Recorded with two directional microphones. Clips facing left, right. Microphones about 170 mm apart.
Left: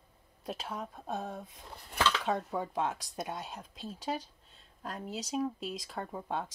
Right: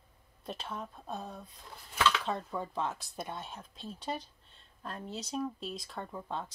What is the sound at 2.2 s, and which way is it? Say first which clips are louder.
Speech: left 3 dB; 15° left (ahead or behind).